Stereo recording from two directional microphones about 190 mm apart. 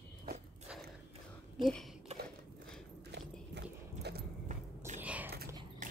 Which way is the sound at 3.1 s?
60° right (ahead or behind).